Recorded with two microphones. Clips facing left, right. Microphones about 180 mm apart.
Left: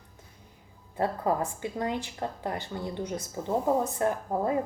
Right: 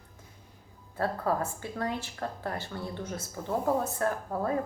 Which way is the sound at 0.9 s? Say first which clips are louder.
Left 2 dB; 20° left (ahead or behind).